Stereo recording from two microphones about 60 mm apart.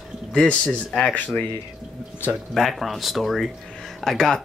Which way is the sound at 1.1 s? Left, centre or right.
Left.